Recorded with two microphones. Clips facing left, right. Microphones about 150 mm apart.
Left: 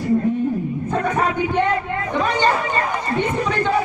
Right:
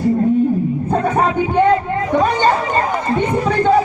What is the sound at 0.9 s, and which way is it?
Music, 30° right (ahead or behind).